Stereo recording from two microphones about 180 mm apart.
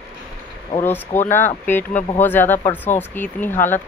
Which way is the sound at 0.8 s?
10° left (ahead or behind).